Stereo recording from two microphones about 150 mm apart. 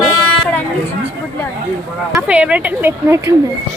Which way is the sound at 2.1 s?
10° right (ahead or behind).